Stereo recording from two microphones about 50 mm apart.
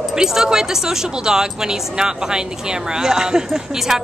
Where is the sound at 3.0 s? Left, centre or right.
Centre.